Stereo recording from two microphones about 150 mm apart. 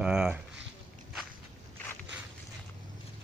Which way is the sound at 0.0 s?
5° right (ahead or behind).